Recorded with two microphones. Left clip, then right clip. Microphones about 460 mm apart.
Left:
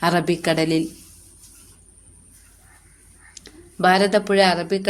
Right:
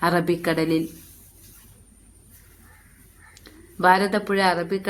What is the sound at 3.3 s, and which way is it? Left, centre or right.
Speech, right.